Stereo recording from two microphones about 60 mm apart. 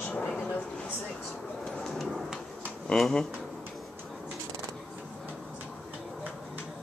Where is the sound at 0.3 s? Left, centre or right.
Centre.